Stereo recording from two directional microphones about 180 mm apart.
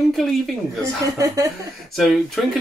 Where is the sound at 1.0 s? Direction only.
15° right (ahead or behind).